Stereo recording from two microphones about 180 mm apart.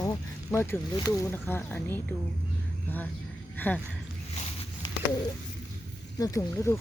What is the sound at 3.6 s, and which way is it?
Speech, 10° left (ahead or behind).